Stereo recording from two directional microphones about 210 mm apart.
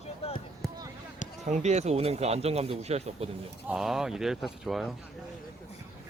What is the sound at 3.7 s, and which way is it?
Speech, centre (ahead or behind).